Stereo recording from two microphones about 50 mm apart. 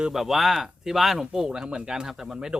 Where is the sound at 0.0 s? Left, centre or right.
Centre.